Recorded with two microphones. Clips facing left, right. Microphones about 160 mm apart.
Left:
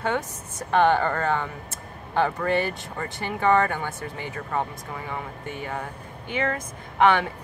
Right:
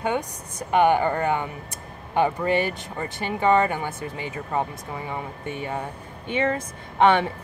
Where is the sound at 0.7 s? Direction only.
15° right (ahead or behind).